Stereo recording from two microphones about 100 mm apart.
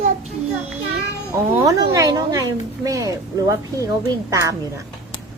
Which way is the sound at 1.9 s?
40° right (ahead or behind).